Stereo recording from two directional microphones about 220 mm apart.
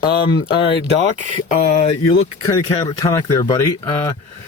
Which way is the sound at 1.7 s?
25° left (ahead or behind).